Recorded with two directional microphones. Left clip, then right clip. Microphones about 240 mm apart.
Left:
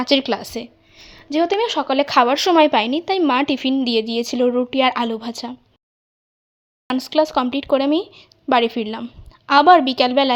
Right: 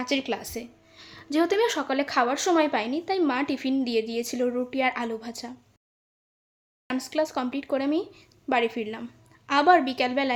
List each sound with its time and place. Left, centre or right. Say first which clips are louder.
0.0 s speech: left 10 dB; left
0.9 s speech: left 6 dB; centre
6.8 s speech: left 9 dB; left